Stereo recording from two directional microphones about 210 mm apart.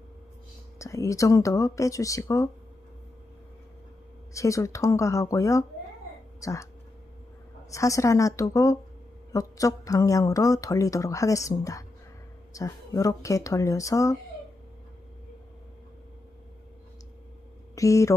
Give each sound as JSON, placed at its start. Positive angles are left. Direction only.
{"t": 0.7, "sound": "speech", "side_deg": 15}
{"t": 4.3, "sound": "speech", "side_deg": 15}
{"t": 7.7, "sound": "speech", "side_deg": 15}
{"t": 17.7, "sound": "speech", "side_deg": 15}